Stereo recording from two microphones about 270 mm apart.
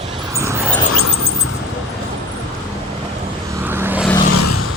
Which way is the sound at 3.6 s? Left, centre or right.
Centre.